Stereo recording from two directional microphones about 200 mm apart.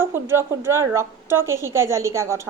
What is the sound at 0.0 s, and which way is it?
A woman's voice, 10° right (ahead or behind).